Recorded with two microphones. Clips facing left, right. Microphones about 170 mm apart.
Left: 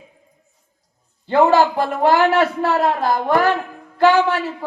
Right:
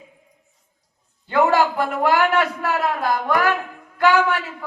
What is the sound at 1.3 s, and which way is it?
A man's voice, 25° left (ahead or behind).